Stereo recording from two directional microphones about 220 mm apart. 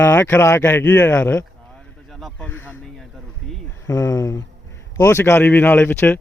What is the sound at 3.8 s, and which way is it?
Speech, 15° left (ahead or behind).